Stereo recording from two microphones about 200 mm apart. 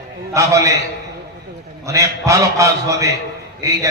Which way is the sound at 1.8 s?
15° right (ahead or behind).